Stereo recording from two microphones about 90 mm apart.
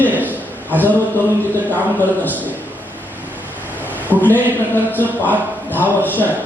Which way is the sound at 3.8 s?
20° left (ahead or behind).